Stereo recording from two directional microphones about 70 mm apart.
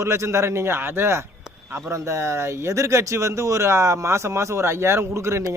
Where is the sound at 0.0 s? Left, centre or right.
Right.